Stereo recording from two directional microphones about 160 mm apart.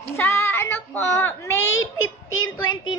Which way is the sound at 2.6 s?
25° left (ahead or behind).